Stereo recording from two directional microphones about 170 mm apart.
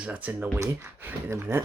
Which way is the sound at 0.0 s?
10° right (ahead or behind).